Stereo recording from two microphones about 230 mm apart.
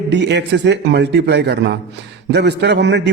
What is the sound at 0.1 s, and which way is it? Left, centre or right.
A man's voice, right.